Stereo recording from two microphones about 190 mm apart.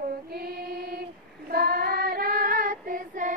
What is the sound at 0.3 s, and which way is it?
Female singing, 55° right (ahead or behind).